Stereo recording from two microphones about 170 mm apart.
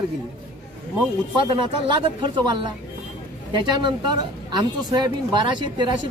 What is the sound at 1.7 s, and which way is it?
Speech, 30° right (ahead or behind).